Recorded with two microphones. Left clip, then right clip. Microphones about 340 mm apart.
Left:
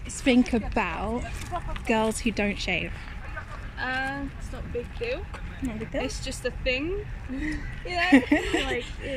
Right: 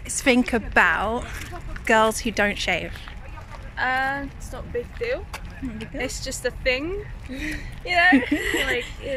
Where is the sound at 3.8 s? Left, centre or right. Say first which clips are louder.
Right 6 dB; right.